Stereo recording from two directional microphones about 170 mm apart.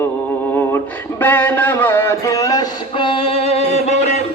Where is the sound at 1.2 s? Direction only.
10° left (ahead or behind); by 4.2 s 40° left (ahead or behind).